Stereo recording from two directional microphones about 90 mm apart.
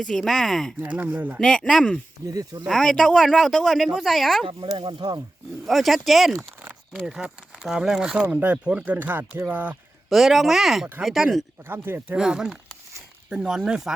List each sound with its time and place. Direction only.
0.1 s speech: 5° left (ahead or behind)
0.8 s speech: 20° right (ahead or behind)
1.4 s speech: 10° left (ahead or behind)
2.2 s speech: 40° right (ahead or behind)
2.6 s speech: 5° left (ahead or behind)
4.8 s speech: 55° right (ahead or behind)
5.6 s speech: centre (ahead or behind); by 9.7 s 20° right (ahead or behind)
10.1 s speech: centre (ahead or behind)
11.7 s speech: 20° right (ahead or behind)
12.1 s speech: 10° right (ahead or behind)